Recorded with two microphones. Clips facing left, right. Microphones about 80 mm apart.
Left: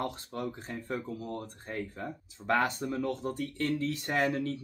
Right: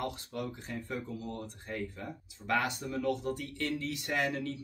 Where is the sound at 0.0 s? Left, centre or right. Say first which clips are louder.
Left 2 dB; left.